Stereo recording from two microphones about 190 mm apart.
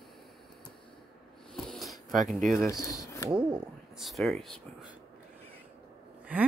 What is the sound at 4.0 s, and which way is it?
Speech, centre (ahead or behind).